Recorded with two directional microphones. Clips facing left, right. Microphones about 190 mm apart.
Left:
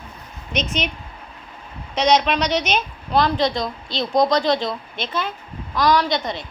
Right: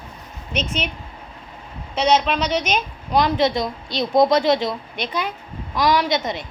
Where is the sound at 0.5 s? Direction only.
5° right (ahead or behind).